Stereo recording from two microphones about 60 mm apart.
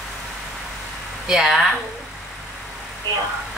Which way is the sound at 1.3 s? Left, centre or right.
Centre.